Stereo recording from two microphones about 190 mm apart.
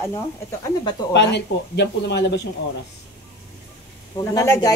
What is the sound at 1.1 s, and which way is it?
Speech, 65° left (ahead or behind).